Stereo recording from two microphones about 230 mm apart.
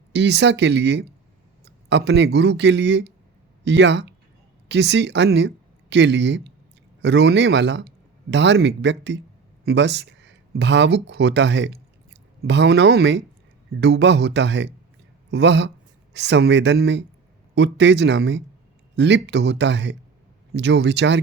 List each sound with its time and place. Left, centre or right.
0.1 s speech: right